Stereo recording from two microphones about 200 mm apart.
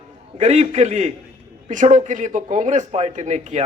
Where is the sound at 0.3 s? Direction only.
35° right (ahead or behind).